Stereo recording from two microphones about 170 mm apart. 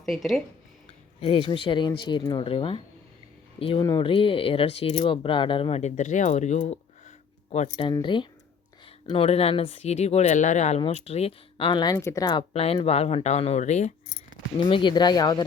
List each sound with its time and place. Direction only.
0.0 s speech: centre (ahead or behind)
1.2 s speech: 30° left (ahead or behind)
7.9 s speech: 30° left (ahead or behind); by 13.9 s 45° left (ahead or behind)
14.7 s speech: 30° left (ahead or behind)